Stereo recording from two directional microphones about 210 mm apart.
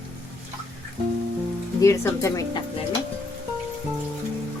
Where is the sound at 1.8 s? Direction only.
15° left (ahead or behind).